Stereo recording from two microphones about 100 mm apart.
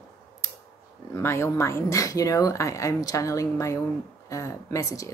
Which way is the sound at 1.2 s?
25° left (ahead or behind).